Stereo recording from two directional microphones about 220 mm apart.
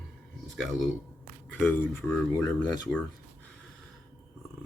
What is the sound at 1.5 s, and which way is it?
Speech, 10° left (ahead or behind).